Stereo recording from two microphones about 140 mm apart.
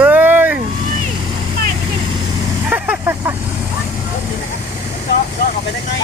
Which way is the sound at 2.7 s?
15° right (ahead or behind).